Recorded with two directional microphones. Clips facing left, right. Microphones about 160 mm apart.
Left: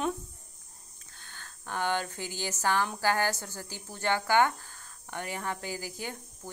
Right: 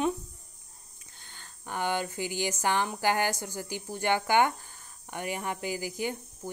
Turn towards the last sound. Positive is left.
turn(degrees=-15)  # may be behind; listen again after turning